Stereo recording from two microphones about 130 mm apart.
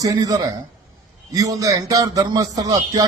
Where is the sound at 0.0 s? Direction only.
30° right (ahead or behind).